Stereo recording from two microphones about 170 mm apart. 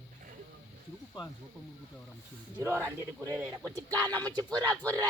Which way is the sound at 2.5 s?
15° right (ahead or behind).